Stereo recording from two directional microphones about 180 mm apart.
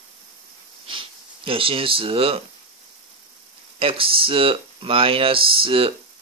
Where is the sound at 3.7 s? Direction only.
30° right (ahead or behind).